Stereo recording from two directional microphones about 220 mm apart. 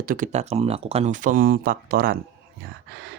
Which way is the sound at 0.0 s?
40° right (ahead or behind).